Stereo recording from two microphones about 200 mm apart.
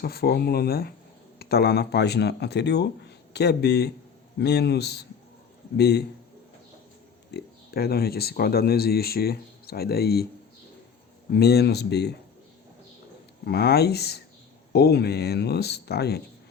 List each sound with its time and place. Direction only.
0.0 s speech: 50° left (ahead or behind)
7.3 s speech: 55° left (ahead or behind)
11.3 s speech: 55° left (ahead or behind)
13.4 s speech: 55° left (ahead or behind)